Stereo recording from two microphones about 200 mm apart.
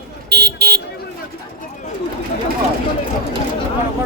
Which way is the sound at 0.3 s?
50° right (ahead or behind).